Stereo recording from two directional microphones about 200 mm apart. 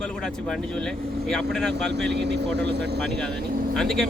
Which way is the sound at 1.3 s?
5° left (ahead or behind).